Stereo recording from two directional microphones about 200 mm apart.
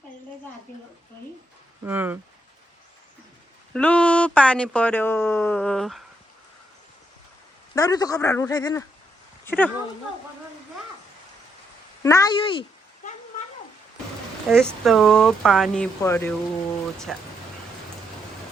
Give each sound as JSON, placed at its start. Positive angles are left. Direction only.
{"t": 1.8, "sound": "speech", "side_deg": -10}
{"t": 3.7, "sound": "speech", "side_deg": 5}
{"t": 7.8, "sound": "speech", "side_deg": 20}
{"t": 12.0, "sound": "speech", "side_deg": 15}
{"t": 14.5, "sound": "speech", "side_deg": 0}
{"t": 17.1, "sound": "speech", "side_deg": 0}